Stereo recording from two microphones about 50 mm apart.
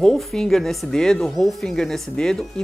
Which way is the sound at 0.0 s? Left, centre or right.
Centre.